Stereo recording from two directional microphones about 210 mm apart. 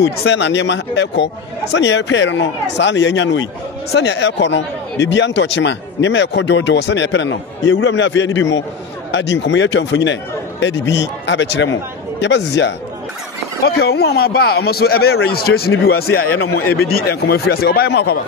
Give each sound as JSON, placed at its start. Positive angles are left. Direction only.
{"t": 0.0, "sound": "speech", "side_deg": 55}
{"t": 16.8, "sound": "speech", "side_deg": 50}